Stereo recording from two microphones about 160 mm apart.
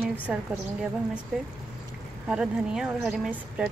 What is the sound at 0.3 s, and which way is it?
Speech, 5° right (ahead or behind).